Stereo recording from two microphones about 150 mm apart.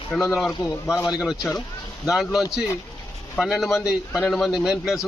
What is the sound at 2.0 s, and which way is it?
Speech, 5° right (ahead or behind).